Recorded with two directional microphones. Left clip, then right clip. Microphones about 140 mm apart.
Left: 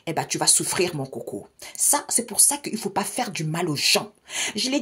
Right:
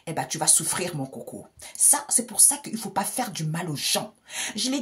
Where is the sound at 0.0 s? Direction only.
40° left (ahead or behind).